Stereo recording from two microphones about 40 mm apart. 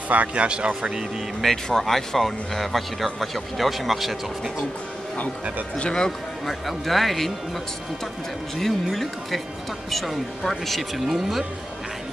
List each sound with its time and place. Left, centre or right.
0.3 s speech: right
1.4 s speech: centre
5.8 s speech: left
6.4 s speech: centre
8.5 s speech: centre